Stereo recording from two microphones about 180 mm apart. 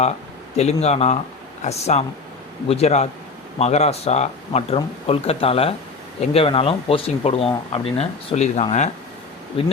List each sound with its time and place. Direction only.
0.5 s speech: 35° left (ahead or behind)